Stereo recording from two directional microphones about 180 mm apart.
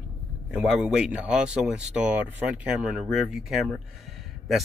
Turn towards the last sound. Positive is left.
turn(degrees=0)  # may be behind; listen again after turning